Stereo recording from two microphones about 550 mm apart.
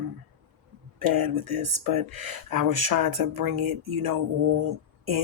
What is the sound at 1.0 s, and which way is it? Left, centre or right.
Speech, right.